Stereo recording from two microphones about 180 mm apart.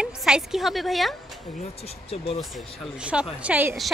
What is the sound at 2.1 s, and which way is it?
Speech, 35° left (ahead or behind).